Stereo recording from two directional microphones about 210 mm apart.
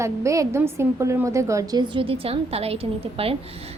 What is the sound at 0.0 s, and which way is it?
A woman's voice, 15° right (ahead or behind).